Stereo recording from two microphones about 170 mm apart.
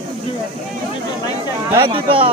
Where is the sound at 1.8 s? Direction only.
30° right (ahead or behind).